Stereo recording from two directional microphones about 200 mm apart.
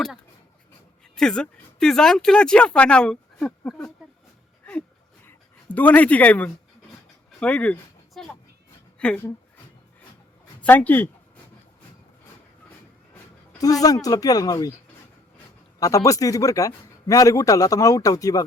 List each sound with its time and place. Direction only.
1.1 s speech: 5° left (ahead or behind)
5.7 s a man's voice: 10° left (ahead or behind)
7.3 s a sound: 5° left (ahead or behind)
9.0 s a woman's voice: 10° left (ahead or behind)
10.6 s a man's voice: 5° left (ahead or behind)
13.6 s a man's voice: 15° left (ahead or behind)
15.8 s a man's voice: 15° left (ahead or behind)